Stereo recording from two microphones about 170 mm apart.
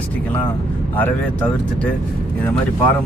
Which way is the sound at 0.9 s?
10° left (ahead or behind).